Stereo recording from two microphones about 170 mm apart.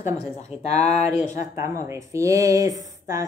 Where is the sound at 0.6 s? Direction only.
40° left (ahead or behind).